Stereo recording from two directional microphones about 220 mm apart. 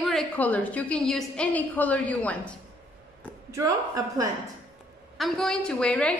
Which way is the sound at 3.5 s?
15° right (ahead or behind).